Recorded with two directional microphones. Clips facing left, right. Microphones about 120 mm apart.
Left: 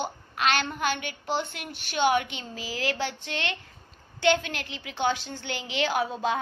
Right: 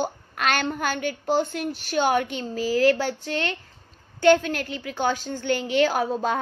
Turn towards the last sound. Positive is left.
turn(degrees=-40)  # may be behind; listen again after turning